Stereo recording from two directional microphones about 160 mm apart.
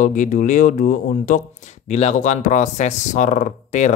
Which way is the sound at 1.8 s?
45° left (ahead or behind).